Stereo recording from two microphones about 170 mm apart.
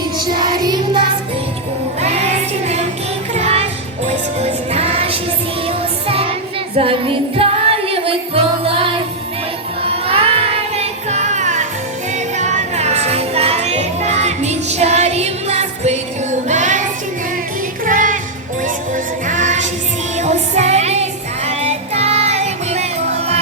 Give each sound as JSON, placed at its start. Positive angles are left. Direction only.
{"t": 0.2, "sound": "music", "side_deg": -25}
{"t": 2.0, "sound": "music", "side_deg": -40}
{"t": 9.8, "sound": "child singing", "side_deg": -35}
{"t": 12.4, "sound": "music", "side_deg": -40}
{"t": 16.5, "sound": "child singing", "side_deg": -45}
{"t": 17.8, "sound": "music", "side_deg": -50}
{"t": 19.3, "sound": "music", "side_deg": -45}
{"t": 20.1, "sound": "child singing", "side_deg": -40}